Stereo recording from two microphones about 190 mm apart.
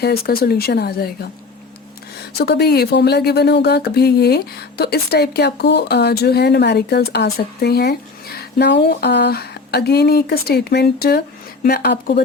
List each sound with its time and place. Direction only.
0.0 s speech: 55° left (ahead or behind)
2.4 s speech: 55° left (ahead or behind)